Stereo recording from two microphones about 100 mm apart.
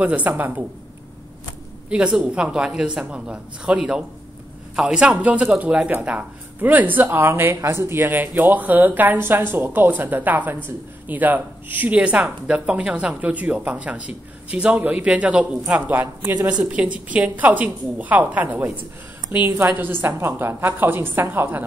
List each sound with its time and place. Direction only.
0.0 s speech: 15° right (ahead or behind)
1.9 s a woman's voice: 10° right (ahead or behind)